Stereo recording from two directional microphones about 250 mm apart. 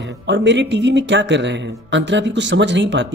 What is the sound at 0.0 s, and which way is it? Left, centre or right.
Speech, right.